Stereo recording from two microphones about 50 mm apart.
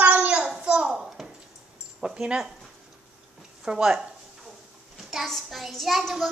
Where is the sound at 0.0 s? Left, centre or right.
Right.